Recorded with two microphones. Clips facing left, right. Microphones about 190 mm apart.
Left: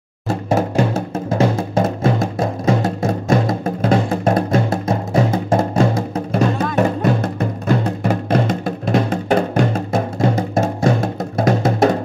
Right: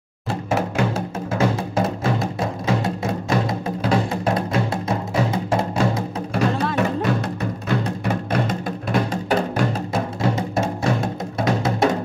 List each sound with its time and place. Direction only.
0.5 s music: 40° left (ahead or behind)
8.6 s music: 40° left (ahead or behind)